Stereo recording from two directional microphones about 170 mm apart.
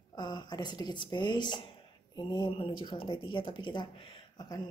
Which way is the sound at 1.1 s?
25° left (ahead or behind).